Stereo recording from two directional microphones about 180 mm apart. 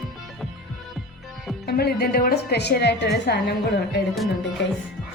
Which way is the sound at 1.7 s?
60° left (ahead or behind).